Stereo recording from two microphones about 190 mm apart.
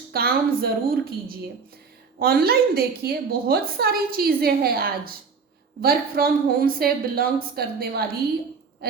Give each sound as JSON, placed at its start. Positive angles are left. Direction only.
{"t": 0.1, "sound": "a woman's voice", "side_deg": -55}
{"t": 8.8, "sound": "owl", "side_deg": -55}